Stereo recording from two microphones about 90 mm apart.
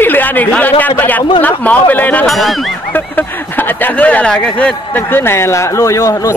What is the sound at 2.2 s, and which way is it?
Speech, centre (ahead or behind).